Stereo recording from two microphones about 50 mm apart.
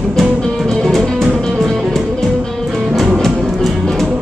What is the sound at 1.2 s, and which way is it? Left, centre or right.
Music, centre.